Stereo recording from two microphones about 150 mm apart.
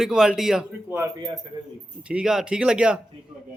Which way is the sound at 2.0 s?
5° right (ahead or behind).